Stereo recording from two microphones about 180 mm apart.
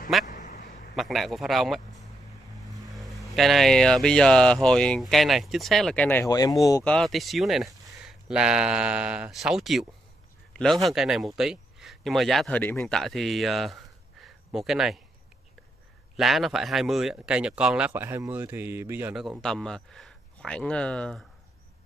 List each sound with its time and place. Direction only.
0.3 s a sound: 45° left (ahead or behind)
0.9 s speech: centre (ahead or behind)
2.9 s speech: centre (ahead or behind); by 6.5 s 20° left (ahead or behind)
6.8 s speech: 5° left (ahead or behind)
16.2 s speech: centre (ahead or behind)